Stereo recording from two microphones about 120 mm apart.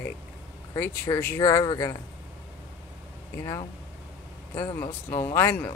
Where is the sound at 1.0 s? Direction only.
20° left (ahead or behind).